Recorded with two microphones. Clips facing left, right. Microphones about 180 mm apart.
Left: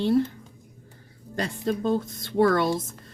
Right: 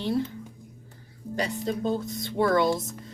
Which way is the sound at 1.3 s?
55° left (ahead or behind).